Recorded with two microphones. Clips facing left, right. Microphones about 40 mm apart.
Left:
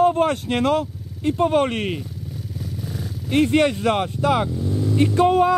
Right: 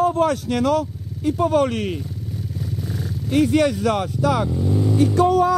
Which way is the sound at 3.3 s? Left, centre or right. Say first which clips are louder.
Even; left.